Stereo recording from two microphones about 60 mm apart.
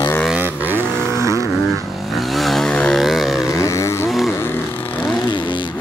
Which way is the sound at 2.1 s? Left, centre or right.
Centre.